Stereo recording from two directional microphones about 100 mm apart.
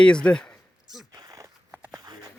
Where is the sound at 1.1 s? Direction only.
40° right (ahead or behind).